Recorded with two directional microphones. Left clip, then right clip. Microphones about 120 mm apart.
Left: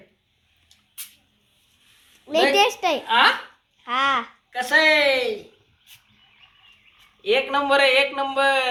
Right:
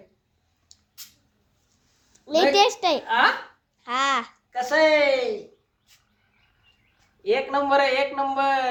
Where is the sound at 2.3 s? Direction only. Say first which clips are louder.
Even; 15° right (ahead or behind).